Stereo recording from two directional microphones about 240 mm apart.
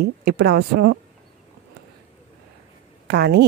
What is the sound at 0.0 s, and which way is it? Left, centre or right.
Speech, right.